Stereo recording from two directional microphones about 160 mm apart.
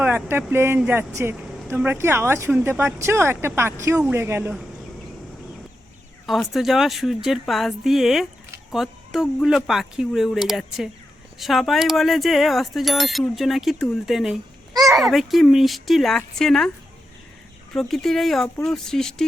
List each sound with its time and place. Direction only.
0.0 s speech: 15° right (ahead or behind)
6.2 s speech: centre (ahead or behind)
17.7 s speech: centre (ahead or behind)